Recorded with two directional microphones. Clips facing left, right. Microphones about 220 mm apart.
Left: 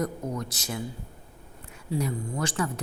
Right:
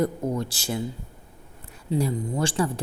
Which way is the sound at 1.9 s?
30° right (ahead or behind).